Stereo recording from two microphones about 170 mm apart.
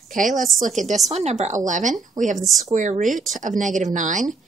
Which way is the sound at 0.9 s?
40° right (ahead or behind).